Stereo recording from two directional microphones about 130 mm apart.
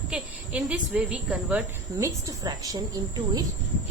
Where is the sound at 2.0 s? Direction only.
25° right (ahead or behind).